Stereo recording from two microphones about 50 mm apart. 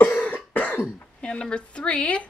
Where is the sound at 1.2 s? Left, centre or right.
Centre.